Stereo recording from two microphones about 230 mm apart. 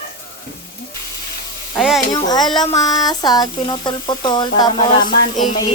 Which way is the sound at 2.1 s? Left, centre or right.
Centre.